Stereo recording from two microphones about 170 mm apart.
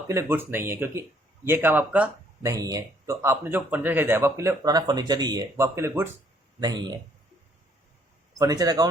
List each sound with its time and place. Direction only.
0.1 s speech: 15° right (ahead or behind)
2.5 s speech: 20° right (ahead or behind)
6.6 s speech: 25° right (ahead or behind)
8.4 s speech: 20° right (ahead or behind)